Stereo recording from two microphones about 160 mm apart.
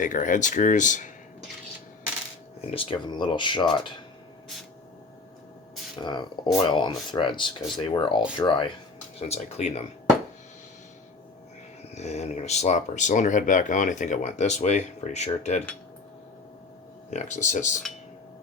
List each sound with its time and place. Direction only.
0.0 s speech: 55° left (ahead or behind)
2.6 s speech: 35° left (ahead or behind)
6.0 s speech: 30° left (ahead or behind)
9.2 s speech: 40° left (ahead or behind)
11.9 s speech: 45° left (ahead or behind)
17.1 s speech: 50° left (ahead or behind)